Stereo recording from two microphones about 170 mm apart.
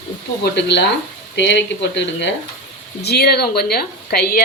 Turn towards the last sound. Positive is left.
turn(degrees=65)  # may be behind; listen again after turning